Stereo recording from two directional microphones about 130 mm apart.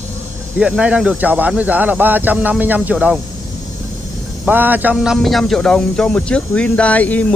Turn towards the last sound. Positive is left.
turn(degrees=10)  # may be behind; listen again after turning